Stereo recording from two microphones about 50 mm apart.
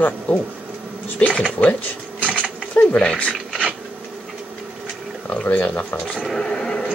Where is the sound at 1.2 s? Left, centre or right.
Left.